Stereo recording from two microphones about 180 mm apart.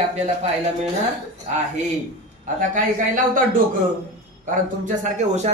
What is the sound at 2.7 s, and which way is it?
A man's voice, 45° right (ahead or behind).